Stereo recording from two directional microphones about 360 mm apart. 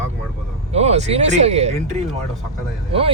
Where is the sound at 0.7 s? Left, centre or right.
Centre.